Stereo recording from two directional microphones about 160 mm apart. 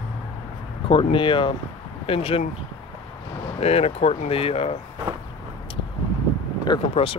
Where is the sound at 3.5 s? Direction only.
40° left (ahead or behind).